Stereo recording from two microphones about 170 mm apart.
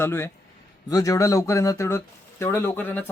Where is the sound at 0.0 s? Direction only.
15° left (ahead or behind).